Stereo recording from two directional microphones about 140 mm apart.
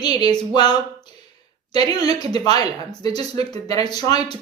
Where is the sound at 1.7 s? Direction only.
30° left (ahead or behind).